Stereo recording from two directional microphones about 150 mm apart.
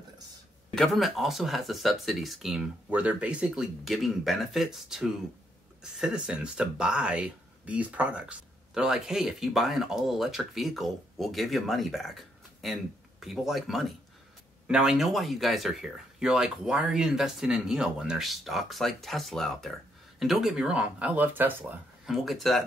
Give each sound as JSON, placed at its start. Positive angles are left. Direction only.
{"t": 0.7, "sound": "speech", "side_deg": 0}